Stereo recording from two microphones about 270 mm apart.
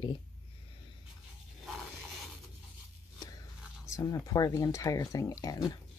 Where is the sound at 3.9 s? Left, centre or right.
Centre.